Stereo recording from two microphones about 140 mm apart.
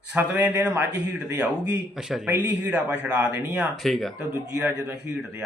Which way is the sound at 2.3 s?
15° right (ahead or behind).